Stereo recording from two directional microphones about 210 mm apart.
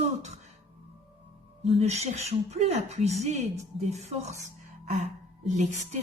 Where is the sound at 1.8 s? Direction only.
30° right (ahead or behind).